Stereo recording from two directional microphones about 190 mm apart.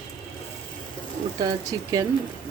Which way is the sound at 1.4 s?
20° right (ahead or behind).